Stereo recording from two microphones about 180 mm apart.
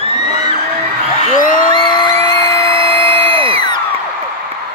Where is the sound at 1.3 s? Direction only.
50° left (ahead or behind).